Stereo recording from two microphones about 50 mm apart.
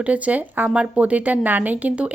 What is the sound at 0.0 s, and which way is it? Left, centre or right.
A woman's voice, right.